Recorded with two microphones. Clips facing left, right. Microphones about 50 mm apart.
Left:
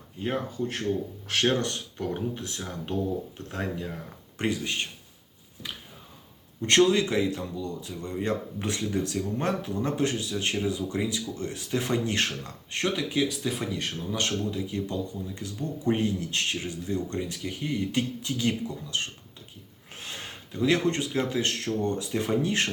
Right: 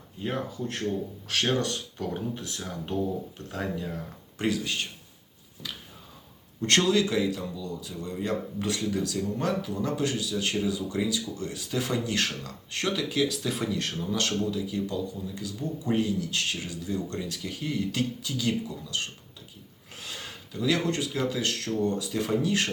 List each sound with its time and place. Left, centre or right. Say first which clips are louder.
0.2 s speech: left 2 dB; centre
1.3 s speech: left 1 dB; left
2.6 s speech: even; centre
3.3 s speech: even; left
6.6 s speech: left 2 dB; centre
20.0 s gasp: left 1 dB; left
21.2 s speech: left 1 dB; left